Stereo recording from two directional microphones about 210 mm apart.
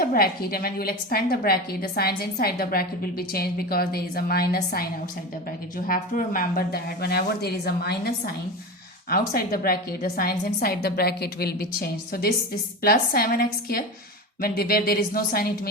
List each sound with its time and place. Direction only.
0.0 s a woman's voice: 45° left (ahead or behind)